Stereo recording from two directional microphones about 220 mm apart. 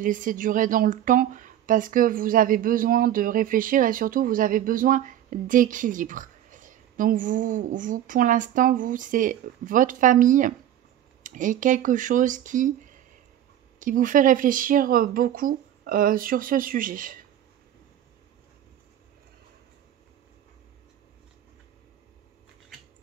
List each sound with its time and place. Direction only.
0.0 s a woman's voice: 35° right (ahead or behind)